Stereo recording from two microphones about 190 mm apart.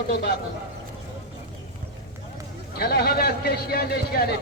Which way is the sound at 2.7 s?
55° left (ahead or behind).